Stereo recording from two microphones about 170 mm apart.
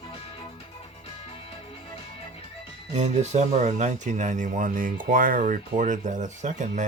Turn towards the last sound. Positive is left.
turn(degrees=-50)  # may be behind; listen again after turning